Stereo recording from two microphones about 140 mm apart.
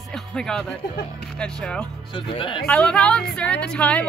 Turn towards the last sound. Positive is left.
turn(degrees=10)  # may be behind; listen again after turning